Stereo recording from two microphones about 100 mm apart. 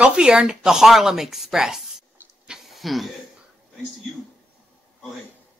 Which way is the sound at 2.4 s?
5° right (ahead or behind).